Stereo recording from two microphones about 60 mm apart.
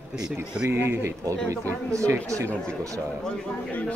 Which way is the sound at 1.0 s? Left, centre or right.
Right.